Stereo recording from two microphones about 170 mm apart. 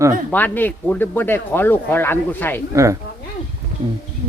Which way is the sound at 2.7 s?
15° right (ahead or behind).